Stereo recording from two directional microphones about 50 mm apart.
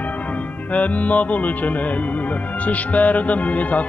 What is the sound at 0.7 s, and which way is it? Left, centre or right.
Music, left.